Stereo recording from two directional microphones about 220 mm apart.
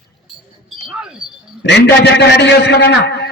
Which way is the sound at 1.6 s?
50° left (ahead or behind).